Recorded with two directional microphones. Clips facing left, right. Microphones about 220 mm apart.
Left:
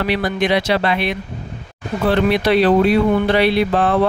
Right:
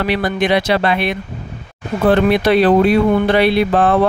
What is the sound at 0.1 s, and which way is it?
Speech, 55° right (ahead or behind).